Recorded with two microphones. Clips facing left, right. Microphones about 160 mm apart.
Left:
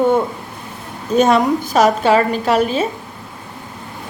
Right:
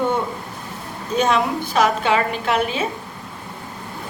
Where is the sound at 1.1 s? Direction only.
45° left (ahead or behind).